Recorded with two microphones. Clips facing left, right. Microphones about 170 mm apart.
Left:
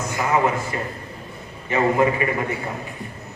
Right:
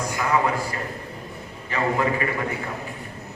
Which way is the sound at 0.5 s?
20° left (ahead or behind).